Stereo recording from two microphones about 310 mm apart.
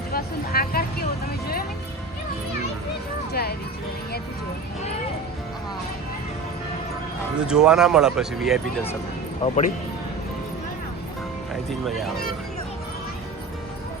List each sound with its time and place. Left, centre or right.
0.1 s speech: left
7.3 s speech: centre
9.4 s speech: left
11.7 s speech: centre